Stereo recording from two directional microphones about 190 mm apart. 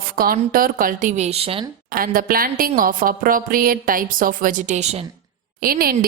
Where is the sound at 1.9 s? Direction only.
50° right (ahead or behind).